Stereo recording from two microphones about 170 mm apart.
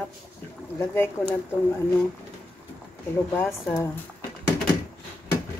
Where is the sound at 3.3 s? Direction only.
15° left (ahead or behind).